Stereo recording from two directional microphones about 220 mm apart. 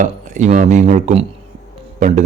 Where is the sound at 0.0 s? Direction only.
35° right (ahead or behind).